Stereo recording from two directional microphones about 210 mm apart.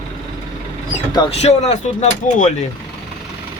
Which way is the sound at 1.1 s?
30° left (ahead or behind).